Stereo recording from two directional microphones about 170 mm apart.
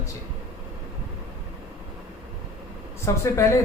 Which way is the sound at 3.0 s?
15° left (ahead or behind).